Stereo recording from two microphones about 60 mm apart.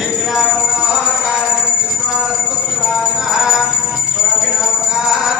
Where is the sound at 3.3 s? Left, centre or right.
Centre.